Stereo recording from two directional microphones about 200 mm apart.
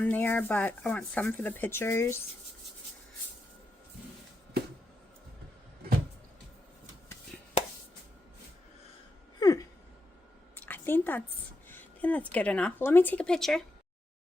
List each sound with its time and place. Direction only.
0.0 s speech: 10° left (ahead or behind)
7.3 s chopping: 5° left (ahead or behind)
9.4 s a sound: 15° left (ahead or behind)
11.7 s speech: 10° left (ahead or behind)